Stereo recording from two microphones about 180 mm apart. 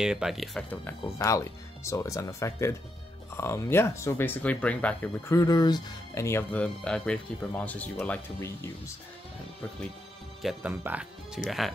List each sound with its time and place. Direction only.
0.0 s speech: 5° right (ahead or behind); by 8.9 s 10° left (ahead or behind)
10.4 s speech: 10° right (ahead or behind)